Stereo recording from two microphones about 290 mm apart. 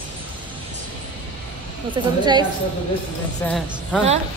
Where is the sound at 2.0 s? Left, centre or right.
Centre.